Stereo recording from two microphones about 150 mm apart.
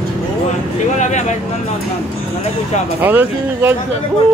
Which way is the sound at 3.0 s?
10° right (ahead or behind).